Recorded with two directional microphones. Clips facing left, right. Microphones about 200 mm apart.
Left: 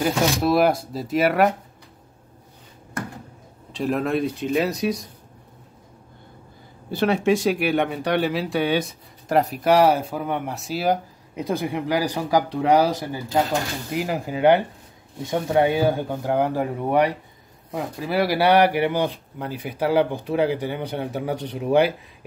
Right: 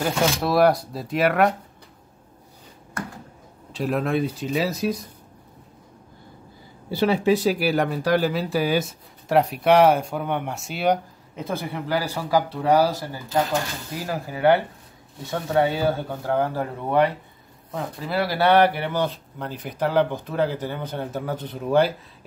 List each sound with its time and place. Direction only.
0.0 s speech: centre (ahead or behind)
3.7 s speech: centre (ahead or behind)
6.9 s speech: 5° right (ahead or behind)
11.3 s speech: 15° left (ahead or behind)